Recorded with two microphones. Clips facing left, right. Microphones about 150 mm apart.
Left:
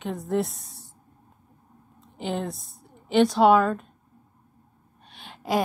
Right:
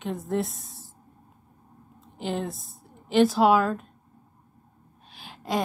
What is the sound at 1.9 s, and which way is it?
A woman's voice, centre (ahead or behind).